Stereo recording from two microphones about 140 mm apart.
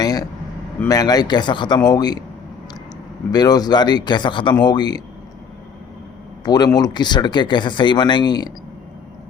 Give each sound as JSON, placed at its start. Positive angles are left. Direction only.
{"t": 0.0, "sound": "a sound", "side_deg": 25}
{"t": 0.9, "sound": "a man's voice", "side_deg": 25}
{"t": 3.3, "sound": "speech", "side_deg": 30}
{"t": 6.4, "sound": "speech", "side_deg": 30}